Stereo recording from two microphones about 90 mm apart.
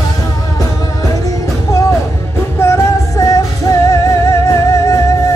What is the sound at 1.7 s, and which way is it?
Music, 35° left (ahead or behind).